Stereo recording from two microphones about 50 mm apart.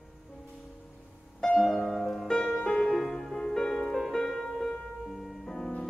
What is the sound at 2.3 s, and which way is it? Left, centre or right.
Music, centre.